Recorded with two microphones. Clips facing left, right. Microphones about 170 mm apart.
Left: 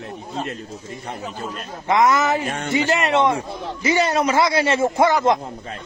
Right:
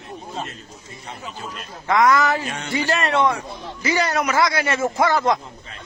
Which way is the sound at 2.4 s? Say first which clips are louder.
Left 4 dB; 50° left (ahead or behind).